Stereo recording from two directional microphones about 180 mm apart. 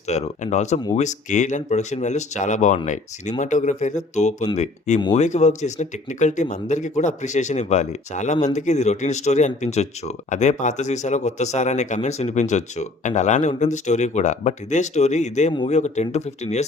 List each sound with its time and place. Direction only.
0.1 s speech: 40° left (ahead or behind)